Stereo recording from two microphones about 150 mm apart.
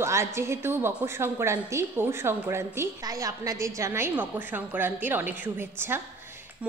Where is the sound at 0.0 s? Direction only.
20° right (ahead or behind).